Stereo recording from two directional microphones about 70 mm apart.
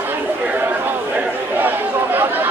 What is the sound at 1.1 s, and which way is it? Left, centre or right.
Chatter, right.